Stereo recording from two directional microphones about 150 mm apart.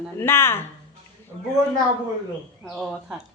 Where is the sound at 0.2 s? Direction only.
15° left (ahead or behind).